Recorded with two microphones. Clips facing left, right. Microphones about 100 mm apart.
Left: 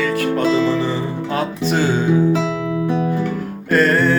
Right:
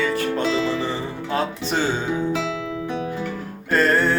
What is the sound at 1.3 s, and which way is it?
Music, 30° right (ahead or behind).